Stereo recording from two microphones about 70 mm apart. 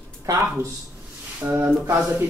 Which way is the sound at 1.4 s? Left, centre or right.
Right.